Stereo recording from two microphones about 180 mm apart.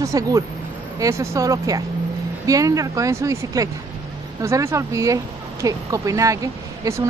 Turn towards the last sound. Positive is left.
turn(degrees=-20)  # may be behind; listen again after turning